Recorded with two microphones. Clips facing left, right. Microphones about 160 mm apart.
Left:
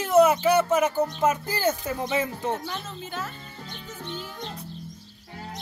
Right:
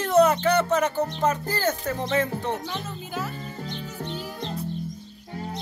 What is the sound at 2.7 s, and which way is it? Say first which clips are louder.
Speech: right 1 dB; 5° right (ahead or behind).